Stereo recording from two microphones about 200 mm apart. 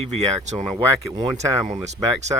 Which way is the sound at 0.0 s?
35° right (ahead or behind).